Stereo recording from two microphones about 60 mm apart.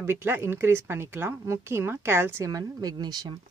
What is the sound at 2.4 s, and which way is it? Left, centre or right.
Speech, right.